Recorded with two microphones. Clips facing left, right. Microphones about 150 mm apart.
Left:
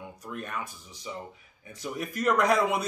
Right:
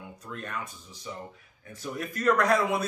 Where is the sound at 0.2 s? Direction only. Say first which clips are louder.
Left 2 dB; 10° left (ahead or behind).